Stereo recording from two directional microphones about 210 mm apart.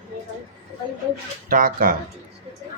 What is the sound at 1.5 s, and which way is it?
Speech, 40° right (ahead or behind).